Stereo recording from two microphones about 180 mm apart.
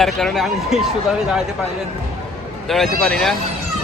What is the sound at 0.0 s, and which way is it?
Speech, centre (ahead or behind).